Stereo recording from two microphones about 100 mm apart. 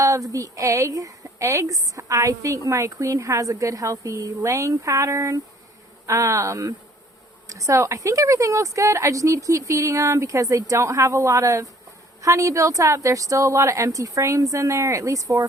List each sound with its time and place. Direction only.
0.0 s a woman's voice: 35° right (ahead or behind)